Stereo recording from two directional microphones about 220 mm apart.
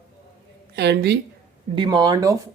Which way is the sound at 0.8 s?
50° right (ahead or behind).